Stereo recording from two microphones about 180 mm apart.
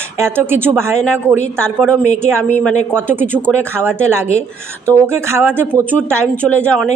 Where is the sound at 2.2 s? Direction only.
15° right (ahead or behind).